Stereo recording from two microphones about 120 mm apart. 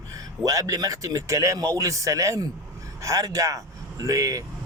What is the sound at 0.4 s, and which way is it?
Speech, 30° right (ahead or behind).